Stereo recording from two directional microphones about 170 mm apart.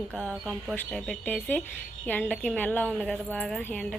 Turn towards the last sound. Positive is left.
turn(degrees=5)  # may be behind; listen again after turning